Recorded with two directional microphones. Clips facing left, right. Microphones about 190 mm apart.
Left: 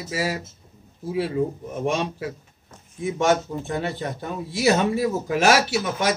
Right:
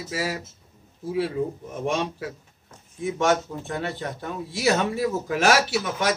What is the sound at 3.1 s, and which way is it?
A man's voice, 15° left (ahead or behind).